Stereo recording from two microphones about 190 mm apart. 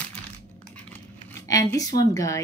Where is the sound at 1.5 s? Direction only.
20° left (ahead or behind).